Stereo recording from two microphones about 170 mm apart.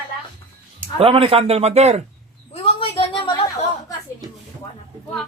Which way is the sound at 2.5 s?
30° left (ahead or behind).